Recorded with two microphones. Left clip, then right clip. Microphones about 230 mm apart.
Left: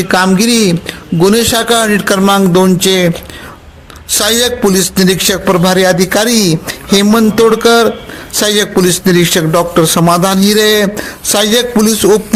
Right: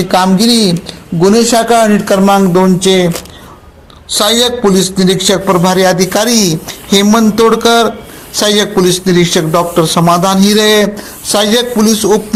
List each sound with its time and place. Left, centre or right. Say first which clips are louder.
0.0 s a man's voice: even; left
0.3 s a man's voice: even; left
0.7 s speech: left 2 dB; left
1.4 s speech: right 2 dB; left
4.2 s a man's voice: right 1 dB; left
9.2 s a man's voice: even; left
9.5 s a man's voice: left 1 dB; left
11.4 s a man's voice: left 1 dB; left